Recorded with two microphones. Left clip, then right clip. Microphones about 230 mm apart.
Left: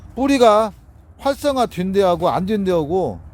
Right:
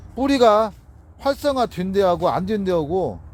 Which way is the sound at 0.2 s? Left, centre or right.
Centre.